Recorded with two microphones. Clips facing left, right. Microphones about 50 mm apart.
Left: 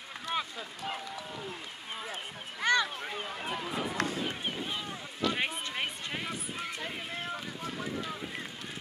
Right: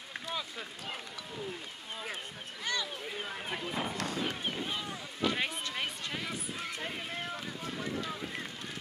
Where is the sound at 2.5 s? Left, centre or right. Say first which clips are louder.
Left 9 dB; left.